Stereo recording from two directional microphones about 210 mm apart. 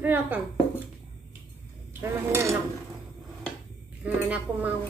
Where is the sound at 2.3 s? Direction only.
10° right (ahead or behind).